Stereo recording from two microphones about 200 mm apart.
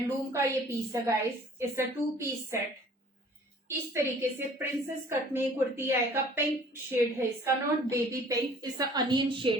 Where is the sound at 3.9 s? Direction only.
15° right (ahead or behind).